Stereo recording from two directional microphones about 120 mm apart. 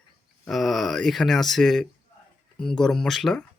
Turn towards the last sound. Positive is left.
turn(degrees=0)  # may be behind; listen again after turning